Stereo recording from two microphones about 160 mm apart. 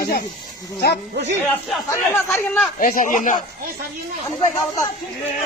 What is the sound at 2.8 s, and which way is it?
Speech, 55° left (ahead or behind).